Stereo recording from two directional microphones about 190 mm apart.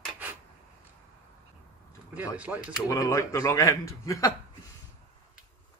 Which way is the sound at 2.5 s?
5° right (ahead or behind).